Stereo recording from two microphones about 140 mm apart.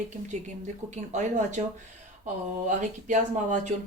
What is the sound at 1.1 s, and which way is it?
Speech, 60° right (ahead or behind).